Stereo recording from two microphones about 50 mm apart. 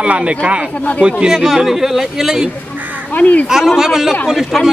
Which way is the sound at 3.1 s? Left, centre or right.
Left.